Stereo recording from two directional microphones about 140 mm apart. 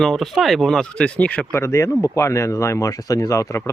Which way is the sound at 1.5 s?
20° left (ahead or behind).